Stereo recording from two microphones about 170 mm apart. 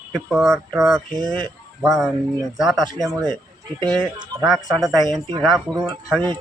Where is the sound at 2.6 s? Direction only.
Centre (ahead or behind).